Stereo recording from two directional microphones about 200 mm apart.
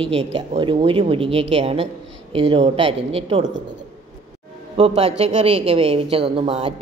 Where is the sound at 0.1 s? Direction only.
30° right (ahead or behind).